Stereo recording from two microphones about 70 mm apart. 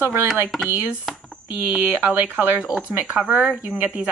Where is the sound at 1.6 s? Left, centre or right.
Right.